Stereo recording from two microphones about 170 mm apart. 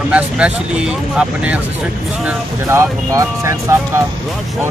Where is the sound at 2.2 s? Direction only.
15° right (ahead or behind).